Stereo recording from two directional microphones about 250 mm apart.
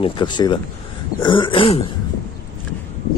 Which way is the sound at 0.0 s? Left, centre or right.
Centre.